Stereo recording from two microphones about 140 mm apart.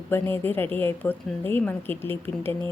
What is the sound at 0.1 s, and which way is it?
A woman's voice, 15° left (ahead or behind).